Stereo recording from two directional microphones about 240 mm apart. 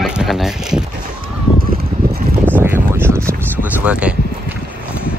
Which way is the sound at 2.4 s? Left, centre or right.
Centre.